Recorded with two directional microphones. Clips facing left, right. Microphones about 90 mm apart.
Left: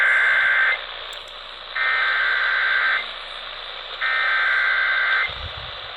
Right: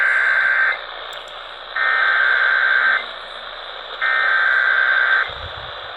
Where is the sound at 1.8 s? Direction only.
40° right (ahead or behind).